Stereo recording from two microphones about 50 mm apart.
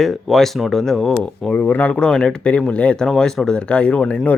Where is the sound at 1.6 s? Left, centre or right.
Left.